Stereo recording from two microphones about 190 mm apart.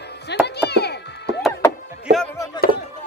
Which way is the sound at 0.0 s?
60° left (ahead or behind).